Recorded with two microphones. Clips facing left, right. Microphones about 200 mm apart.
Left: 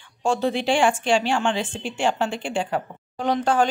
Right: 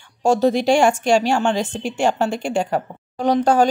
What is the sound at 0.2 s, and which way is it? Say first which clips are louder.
Speech: right 6 dB; 40° right (ahead or behind).